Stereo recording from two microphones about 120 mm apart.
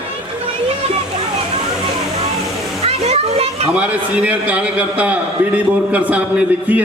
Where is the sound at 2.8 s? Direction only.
55° right (ahead or behind).